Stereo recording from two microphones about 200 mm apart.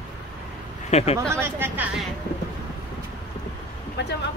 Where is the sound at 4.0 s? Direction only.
60° left (ahead or behind).